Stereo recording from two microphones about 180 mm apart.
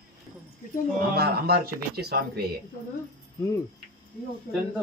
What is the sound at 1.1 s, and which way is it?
Speech, 60° right (ahead or behind).